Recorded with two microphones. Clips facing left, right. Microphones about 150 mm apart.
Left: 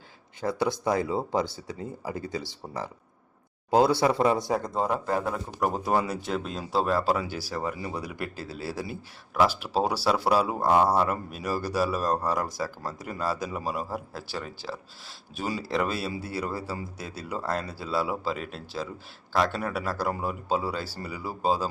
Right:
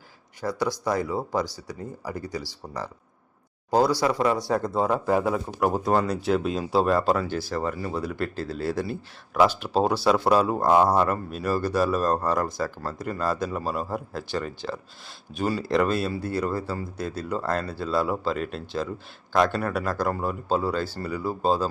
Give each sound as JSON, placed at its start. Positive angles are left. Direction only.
{"t": 0.4, "sound": "speech", "side_deg": 25}
{"t": 4.6, "sound": "speech", "side_deg": -5}